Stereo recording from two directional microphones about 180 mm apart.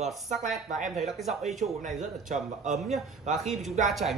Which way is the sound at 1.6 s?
40° right (ahead or behind).